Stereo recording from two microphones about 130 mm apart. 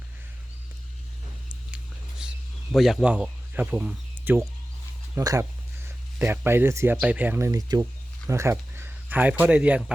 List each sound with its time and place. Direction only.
1.5 s whispering: 5° right (ahead or behind)
2.7 s speech: centre (ahead or behind)
5.1 s speech: 25° right (ahead or behind)